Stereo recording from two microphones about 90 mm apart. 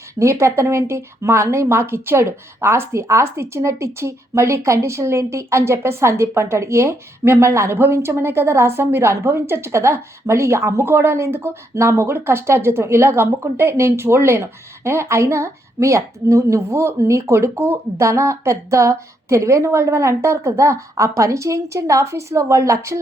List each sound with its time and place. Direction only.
0.2 s a woman's voice: 30° right (ahead or behind)